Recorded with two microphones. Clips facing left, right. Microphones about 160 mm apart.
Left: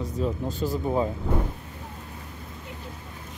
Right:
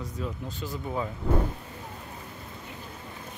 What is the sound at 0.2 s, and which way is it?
Speech, 35° left (ahead or behind).